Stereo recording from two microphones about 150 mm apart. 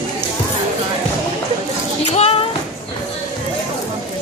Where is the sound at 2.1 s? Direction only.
45° left (ahead or behind).